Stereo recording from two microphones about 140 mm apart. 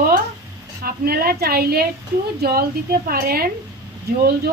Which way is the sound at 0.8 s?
90° right.